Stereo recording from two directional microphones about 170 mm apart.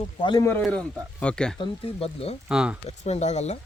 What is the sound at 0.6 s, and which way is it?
Speech, 5° left (ahead or behind).